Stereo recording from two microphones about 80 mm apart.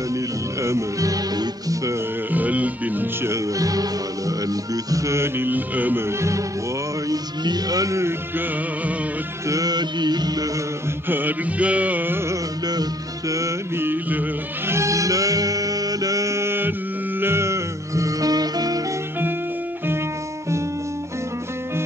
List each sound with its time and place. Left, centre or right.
0.6 s speech: right
1.3 s music: right
2.3 s music: centre
3.3 s music: right
4.9 s mantra: right
7.1 s music: right
9.5 s a sound: right
11.1 s music: right
13.7 s carnatic music: right
14.7 s music: right